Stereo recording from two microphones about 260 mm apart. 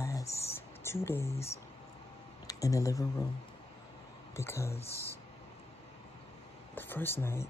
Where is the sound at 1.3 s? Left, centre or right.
Left.